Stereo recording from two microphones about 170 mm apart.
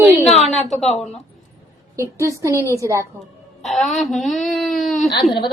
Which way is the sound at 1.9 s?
15° right (ahead or behind).